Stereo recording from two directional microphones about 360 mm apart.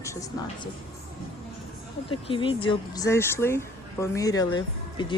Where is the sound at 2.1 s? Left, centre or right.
Centre.